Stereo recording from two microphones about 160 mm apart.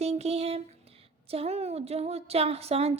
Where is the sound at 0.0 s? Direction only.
40° right (ahead or behind).